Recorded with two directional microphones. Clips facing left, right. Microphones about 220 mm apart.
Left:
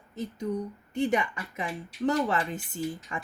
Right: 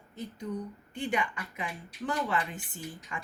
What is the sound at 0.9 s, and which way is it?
Speech, 40° left (ahead or behind).